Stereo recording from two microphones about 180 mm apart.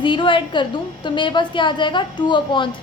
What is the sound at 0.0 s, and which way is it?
A woman's voice, 25° left (ahead or behind).